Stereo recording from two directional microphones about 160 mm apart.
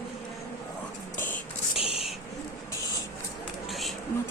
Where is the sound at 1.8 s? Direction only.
40° left (ahead or behind).